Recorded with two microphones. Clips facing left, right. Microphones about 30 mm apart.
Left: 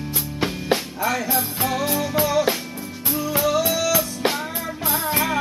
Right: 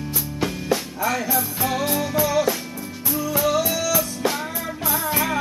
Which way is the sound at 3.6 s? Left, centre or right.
Left.